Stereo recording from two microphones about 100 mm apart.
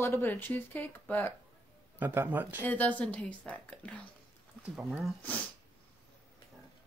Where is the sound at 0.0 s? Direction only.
20° left (ahead or behind).